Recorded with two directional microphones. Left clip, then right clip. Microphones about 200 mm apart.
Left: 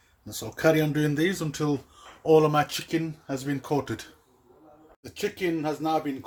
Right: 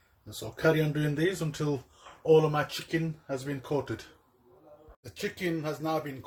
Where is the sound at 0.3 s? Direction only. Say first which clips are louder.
Left 4 dB; 45° left (ahead or behind).